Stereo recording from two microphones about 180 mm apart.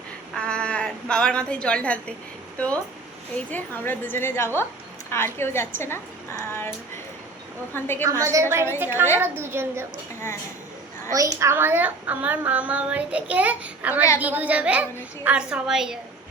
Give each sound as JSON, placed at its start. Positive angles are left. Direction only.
{"t": 0.3, "sound": "a woman's voice", "side_deg": 5}
{"t": 7.7, "sound": "a woman's voice", "side_deg": 10}
{"t": 8.2, "sound": "speech", "side_deg": -15}
{"t": 11.1, "sound": "a woman's voice", "side_deg": -20}